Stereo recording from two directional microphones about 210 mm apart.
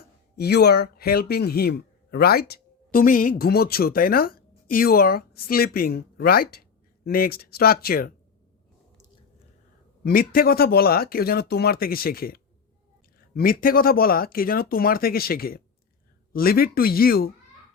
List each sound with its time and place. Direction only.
0.3 s speech: 50° left (ahead or behind)
10.0 s speech: 45° left (ahead or behind)